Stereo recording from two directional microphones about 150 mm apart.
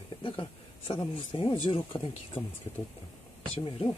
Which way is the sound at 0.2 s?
35° left (ahead or behind).